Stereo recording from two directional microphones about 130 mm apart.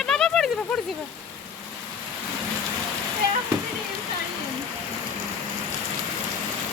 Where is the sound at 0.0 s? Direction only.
5° left (ahead or behind).